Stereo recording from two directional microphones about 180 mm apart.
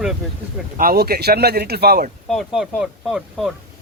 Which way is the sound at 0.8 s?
55° right (ahead or behind).